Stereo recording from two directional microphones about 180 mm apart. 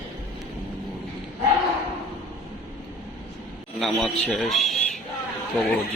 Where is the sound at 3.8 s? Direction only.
Centre (ahead or behind).